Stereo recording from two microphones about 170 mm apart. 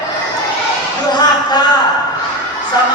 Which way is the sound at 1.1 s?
25° left (ahead or behind).